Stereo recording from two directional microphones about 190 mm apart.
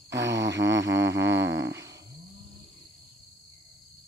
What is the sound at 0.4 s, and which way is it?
Mantra, 15° right (ahead or behind).